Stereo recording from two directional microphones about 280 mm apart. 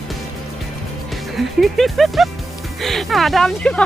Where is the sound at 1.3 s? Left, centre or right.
Centre.